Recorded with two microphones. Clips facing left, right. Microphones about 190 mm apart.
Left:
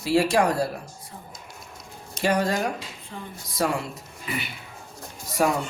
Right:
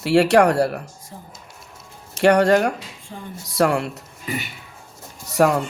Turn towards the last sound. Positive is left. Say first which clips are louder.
# right 6 dB
turn(degrees=-70)  # may be behind; listen again after turning